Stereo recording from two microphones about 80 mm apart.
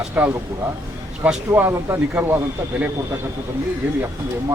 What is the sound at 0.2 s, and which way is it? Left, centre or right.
Speech, centre.